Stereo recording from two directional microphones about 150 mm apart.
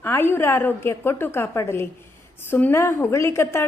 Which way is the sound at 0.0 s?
15° left (ahead or behind).